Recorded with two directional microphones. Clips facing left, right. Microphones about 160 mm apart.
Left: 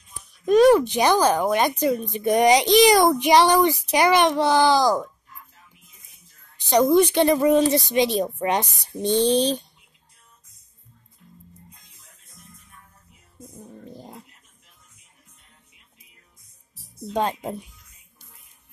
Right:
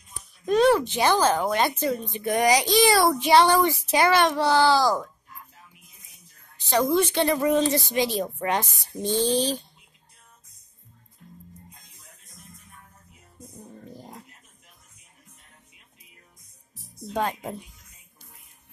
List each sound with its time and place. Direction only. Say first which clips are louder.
0.5 s child singing: left 5 dB; 15° left (ahead or behind)
6.7 s child singing: left 5 dB; 15° left (ahead or behind)
7.9 s a woman's voice: left 4 dB; 20° left (ahead or behind)
17.1 s a woman's voice: left 3 dB; 25° left (ahead or behind)